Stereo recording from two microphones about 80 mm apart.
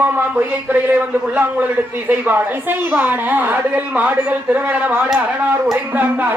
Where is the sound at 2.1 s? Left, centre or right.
Right.